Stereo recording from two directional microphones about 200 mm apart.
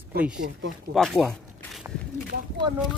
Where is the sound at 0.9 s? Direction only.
Centre (ahead or behind).